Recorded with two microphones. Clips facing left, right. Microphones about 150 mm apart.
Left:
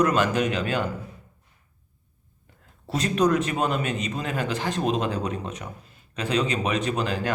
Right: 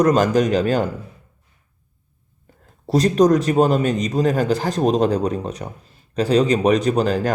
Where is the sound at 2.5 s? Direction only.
40° right (ahead or behind).